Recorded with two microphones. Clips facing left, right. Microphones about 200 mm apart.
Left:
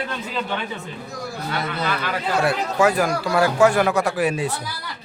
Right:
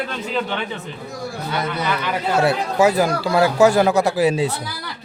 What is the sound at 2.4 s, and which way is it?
Speech, 20° right (ahead or behind).